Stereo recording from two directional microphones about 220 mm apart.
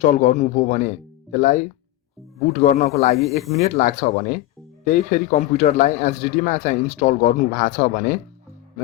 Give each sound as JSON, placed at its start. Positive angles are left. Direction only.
{"t": 0.0, "sound": "speech", "side_deg": 35}